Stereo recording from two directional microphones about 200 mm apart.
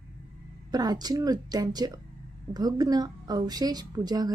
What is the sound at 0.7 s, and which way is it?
A woman's voice, 20° right (ahead or behind).